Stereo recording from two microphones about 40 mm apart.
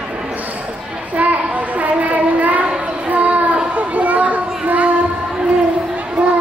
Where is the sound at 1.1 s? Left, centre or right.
Right.